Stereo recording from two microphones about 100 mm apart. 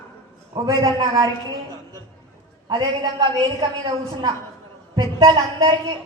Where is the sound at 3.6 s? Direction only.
50° right (ahead or behind).